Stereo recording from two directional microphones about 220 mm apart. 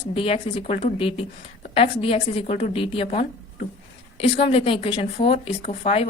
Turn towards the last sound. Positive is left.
turn(degrees=30)  # may be behind; listen again after turning